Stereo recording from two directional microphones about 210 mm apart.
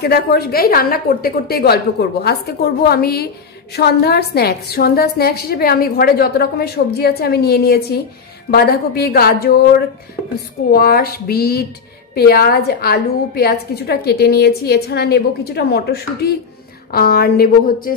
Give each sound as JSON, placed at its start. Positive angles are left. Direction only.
{"t": 0.0, "sound": "a woman's voice", "side_deg": 50}